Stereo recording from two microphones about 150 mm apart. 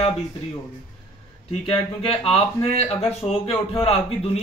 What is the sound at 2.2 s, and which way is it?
Speech, 45° left (ahead or behind).